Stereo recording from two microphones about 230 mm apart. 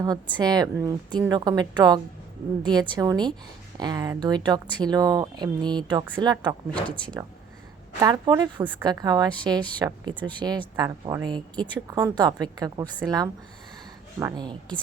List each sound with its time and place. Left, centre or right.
0.0 s speech: centre
6.7 s speech: centre
8.0 s speech: centre